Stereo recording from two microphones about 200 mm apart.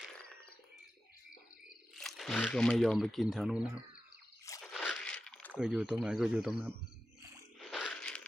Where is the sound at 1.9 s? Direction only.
Centre (ahead or behind).